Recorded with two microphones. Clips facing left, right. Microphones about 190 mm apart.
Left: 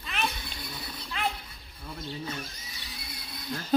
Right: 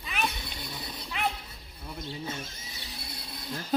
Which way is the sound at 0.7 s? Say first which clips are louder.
Even; 20° right (ahead or behind).